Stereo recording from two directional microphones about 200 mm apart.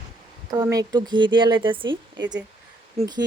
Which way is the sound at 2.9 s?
20° right (ahead or behind).